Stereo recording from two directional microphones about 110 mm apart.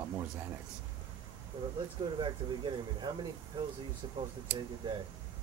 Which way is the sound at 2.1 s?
45° right (ahead or behind).